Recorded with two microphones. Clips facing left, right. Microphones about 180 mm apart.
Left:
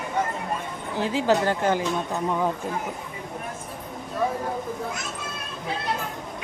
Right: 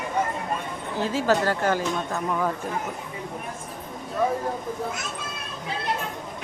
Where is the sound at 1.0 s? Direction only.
15° left (ahead or behind).